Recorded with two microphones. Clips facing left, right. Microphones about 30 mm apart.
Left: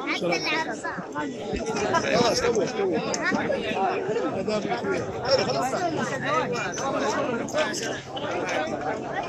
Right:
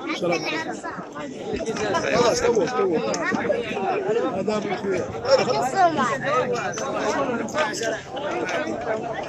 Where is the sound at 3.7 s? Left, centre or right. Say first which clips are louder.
Right 2 dB; centre.